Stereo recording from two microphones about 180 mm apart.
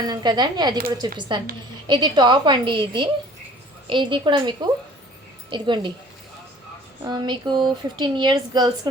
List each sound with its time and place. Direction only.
0.0 s speech: 25° right (ahead or behind)
7.0 s speech: 25° right (ahead or behind)